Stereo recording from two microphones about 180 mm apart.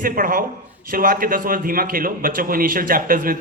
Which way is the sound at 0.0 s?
50° right (ahead or behind).